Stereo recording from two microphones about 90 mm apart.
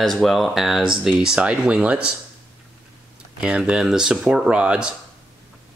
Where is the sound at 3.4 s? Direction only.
10° right (ahead or behind).